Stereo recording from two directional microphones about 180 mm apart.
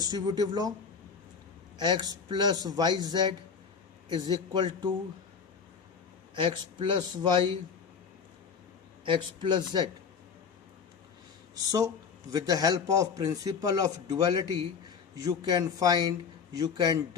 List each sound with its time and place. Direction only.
0.0 s a man's voice: 20° right (ahead or behind)
1.8 s a man's voice: 25° right (ahead or behind)
6.3 s a man's voice: 25° right (ahead or behind)
9.0 s a man's voice: 25° right (ahead or behind)
12.3 s a man's voice: 20° right (ahead or behind)